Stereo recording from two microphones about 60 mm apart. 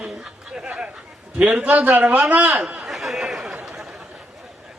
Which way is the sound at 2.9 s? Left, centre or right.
Centre.